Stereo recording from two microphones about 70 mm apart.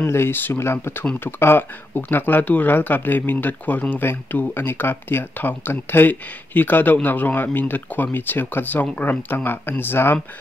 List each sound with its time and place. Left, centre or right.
0.0 s speech: left